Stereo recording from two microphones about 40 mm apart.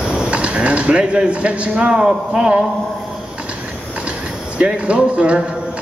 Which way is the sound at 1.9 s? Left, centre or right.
Centre.